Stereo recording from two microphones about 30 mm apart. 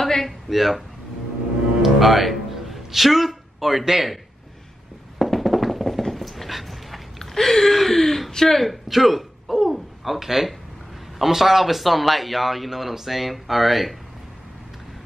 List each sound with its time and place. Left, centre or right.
0.0 s a sound: centre
0.5 s speech: centre
1.8 s music: centre
3.8 s a man's voice: centre
5.2 s tap: centre
6.1 s dog: centre
7.2 s speech: centre
8.5 s a sound: centre
11.1 s speech: centre